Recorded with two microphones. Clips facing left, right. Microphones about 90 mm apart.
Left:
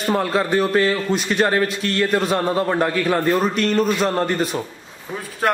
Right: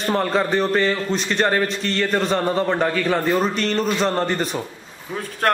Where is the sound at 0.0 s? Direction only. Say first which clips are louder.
Even; 5° left (ahead or behind).